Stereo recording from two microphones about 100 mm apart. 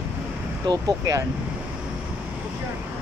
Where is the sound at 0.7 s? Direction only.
40° right (ahead or behind).